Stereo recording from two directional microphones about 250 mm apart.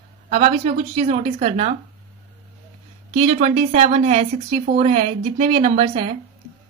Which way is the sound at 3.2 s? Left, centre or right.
Right.